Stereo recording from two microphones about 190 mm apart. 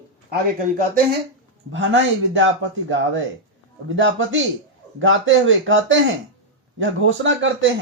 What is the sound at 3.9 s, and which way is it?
A man's voice, 90° right.